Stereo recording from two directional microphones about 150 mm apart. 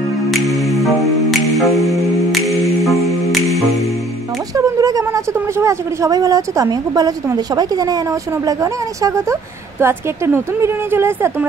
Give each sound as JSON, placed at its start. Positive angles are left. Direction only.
{"t": 0.3, "sound": "music", "side_deg": 0}
{"t": 4.6, "sound": "a woman's voice", "side_deg": -25}